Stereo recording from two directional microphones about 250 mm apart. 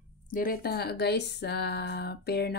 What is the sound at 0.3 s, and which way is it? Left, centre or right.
Speech, left.